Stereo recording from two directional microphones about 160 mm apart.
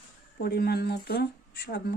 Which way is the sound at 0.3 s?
75° left (ahead or behind).